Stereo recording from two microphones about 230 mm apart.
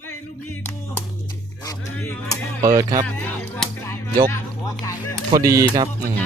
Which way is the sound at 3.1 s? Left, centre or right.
Centre.